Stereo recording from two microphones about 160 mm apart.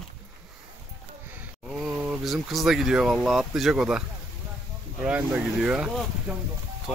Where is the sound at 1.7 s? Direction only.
5° right (ahead or behind).